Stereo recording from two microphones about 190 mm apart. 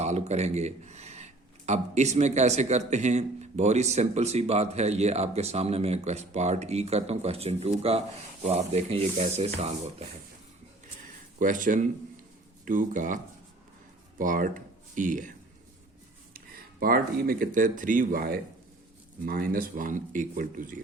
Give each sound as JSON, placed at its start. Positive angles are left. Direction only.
{"t": 0.0, "sound": "speech", "side_deg": -35}
{"t": 11.3, "sound": "speech", "side_deg": -45}
{"t": 14.2, "sound": "speech", "side_deg": -45}
{"t": 16.8, "sound": "speech", "side_deg": -50}